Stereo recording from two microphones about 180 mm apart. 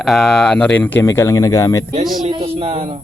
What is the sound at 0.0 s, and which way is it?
Speech, centre (ahead or behind).